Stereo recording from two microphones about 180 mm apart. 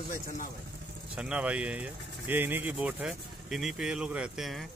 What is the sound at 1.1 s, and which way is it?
Speech, 5° right (ahead or behind).